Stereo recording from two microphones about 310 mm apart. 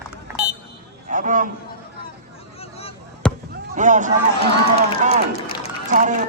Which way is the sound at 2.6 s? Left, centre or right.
Centre.